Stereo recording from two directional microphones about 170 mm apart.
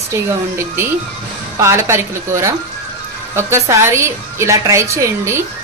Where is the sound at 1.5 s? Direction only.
15° right (ahead or behind).